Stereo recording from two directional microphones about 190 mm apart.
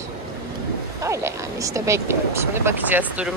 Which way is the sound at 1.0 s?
15° right (ahead or behind).